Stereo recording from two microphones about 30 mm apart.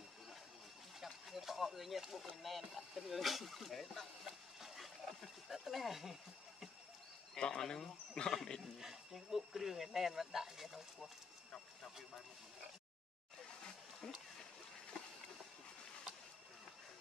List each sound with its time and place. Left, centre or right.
1.0 s a sound: centre
2.1 s speech: centre
4.3 s a sound: centre
7.3 s speech: left
8.7 s speech: centre
14.0 s speech: centre